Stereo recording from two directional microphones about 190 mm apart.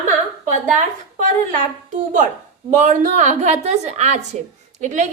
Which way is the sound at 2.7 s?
40° right (ahead or behind).